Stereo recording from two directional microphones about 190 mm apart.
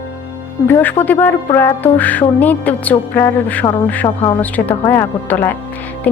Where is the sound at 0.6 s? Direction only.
10° left (ahead or behind).